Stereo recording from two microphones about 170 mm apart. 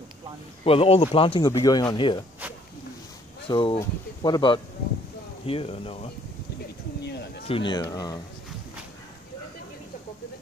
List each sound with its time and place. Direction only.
0.7 s speech: 35° left (ahead or behind)
1.5 s speech: 20° left (ahead or behind)
3.4 s speech: 30° left (ahead or behind)
7.0 s a sound: 75° left (ahead or behind)
7.4 s speech: 30° left (ahead or behind)